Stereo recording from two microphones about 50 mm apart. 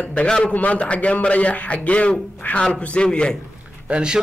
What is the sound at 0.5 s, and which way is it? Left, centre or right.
A man's voice, left.